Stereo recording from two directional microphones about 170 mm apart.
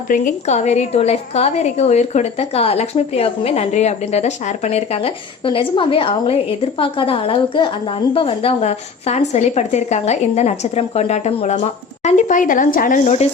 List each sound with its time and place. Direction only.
0.1 s a woman's voice: 45° left (ahead or behind)